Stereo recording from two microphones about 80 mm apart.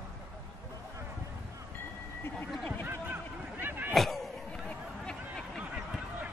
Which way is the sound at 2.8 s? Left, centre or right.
Right.